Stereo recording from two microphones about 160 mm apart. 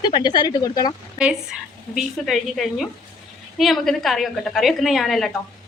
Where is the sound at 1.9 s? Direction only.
Centre (ahead or behind).